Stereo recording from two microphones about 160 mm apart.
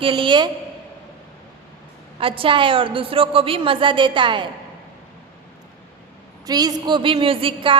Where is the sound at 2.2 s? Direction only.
35° right (ahead or behind).